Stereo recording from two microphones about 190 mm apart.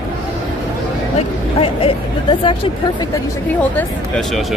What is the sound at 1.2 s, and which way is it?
Speech, 30° left (ahead or behind).